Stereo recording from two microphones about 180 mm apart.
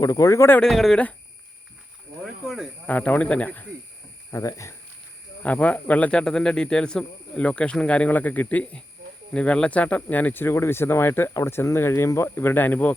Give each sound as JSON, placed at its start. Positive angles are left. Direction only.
{"t": 0.0, "sound": "speech", "side_deg": 20}
{"t": 0.7, "sound": "speech", "side_deg": 0}
{"t": 2.2, "sound": "speech", "side_deg": 0}